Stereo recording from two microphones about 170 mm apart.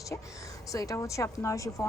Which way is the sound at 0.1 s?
15° left (ahead or behind).